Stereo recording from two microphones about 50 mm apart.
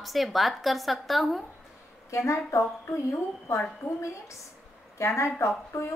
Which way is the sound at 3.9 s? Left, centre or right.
Left.